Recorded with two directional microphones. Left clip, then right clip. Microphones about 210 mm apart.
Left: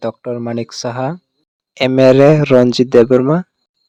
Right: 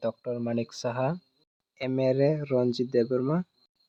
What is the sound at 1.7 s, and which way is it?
Speech, 50° left (ahead or behind).